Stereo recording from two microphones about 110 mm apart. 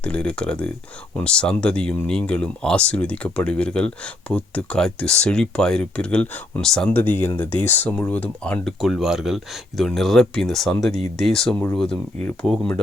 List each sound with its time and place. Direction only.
0.0 s speech: 10° left (ahead or behind)
6.9 s speech: 20° left (ahead or behind)
8.8 s speech: centre (ahead or behind)